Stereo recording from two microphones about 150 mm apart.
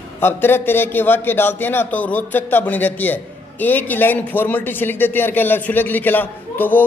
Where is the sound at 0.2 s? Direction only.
15° left (ahead or behind).